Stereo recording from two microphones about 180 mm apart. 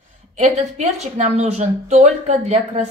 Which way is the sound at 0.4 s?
40° right (ahead or behind).